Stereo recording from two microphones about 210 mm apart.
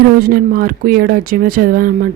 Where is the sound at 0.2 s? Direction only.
45° right (ahead or behind).